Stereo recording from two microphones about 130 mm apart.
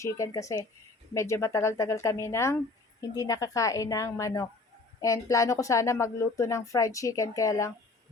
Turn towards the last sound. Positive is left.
turn(degrees=25)  # may be behind; listen again after turning